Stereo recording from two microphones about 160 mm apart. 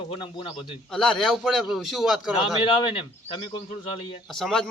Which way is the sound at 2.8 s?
35° left (ahead or behind).